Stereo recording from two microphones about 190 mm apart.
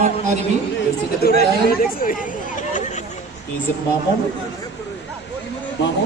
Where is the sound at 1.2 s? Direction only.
50° left (ahead or behind).